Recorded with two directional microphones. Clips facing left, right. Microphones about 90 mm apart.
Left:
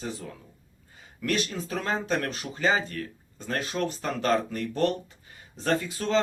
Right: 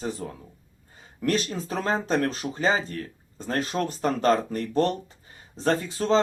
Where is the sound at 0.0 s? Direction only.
35° right (ahead or behind).